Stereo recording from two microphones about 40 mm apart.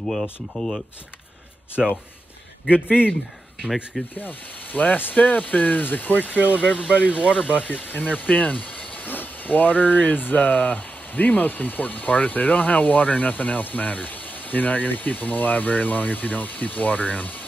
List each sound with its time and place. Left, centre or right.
0.0 s speech: centre
3.1 s speech: centre
4.2 s speech: left